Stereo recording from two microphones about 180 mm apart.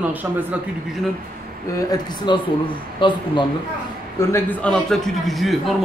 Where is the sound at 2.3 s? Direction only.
25° left (ahead or behind).